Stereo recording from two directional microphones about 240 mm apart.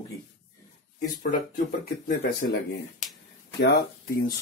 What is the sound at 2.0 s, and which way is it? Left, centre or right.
Speech, left.